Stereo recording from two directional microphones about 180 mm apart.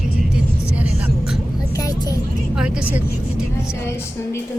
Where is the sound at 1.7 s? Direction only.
20° left (ahead or behind).